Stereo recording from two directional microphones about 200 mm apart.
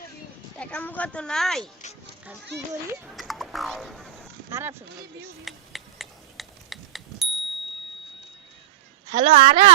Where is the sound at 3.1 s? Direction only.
Centre (ahead or behind).